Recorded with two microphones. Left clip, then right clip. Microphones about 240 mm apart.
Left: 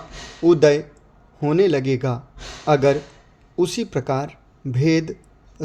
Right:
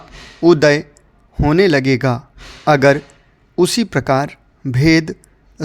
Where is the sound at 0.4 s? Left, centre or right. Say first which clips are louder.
Right 4 dB; right.